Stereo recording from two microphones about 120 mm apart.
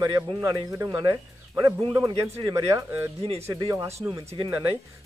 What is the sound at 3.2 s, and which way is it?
Speech, 55° right (ahead or behind).